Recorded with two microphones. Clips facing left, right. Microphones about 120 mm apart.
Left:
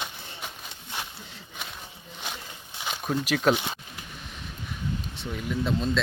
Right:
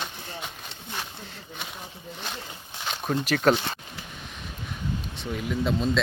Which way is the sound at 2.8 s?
5° left (ahead or behind).